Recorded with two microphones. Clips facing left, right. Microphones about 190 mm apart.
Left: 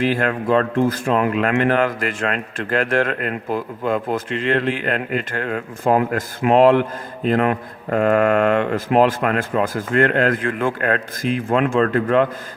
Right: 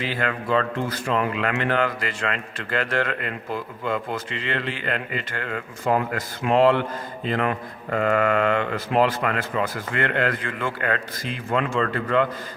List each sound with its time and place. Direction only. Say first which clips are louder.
0.0 s speech: left 7 dB; 45° left (ahead or behind)